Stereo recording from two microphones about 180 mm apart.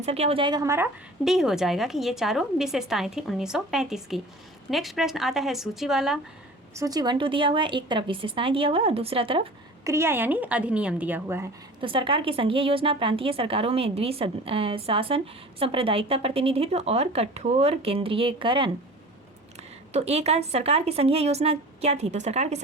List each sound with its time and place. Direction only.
0.0 s a woman's voice: 35° right (ahead or behind); by 0.9 s 15° right (ahead or behind)
1.2 s a woman's voice: centre (ahead or behind)
6.7 s a woman's voice: 20° right (ahead or behind)
9.8 s speech: 15° right (ahead or behind)
11.8 s a woman's voice: 30° right (ahead or behind)
19.9 s a woman's voice: 35° right (ahead or behind)